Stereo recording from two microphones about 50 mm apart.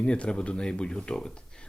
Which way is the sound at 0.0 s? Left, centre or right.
Left.